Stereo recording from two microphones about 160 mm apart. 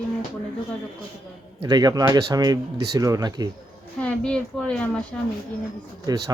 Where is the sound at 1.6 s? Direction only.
25° right (ahead or behind).